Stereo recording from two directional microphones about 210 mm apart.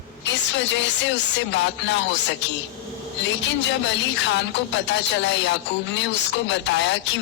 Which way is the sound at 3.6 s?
60° left (ahead or behind).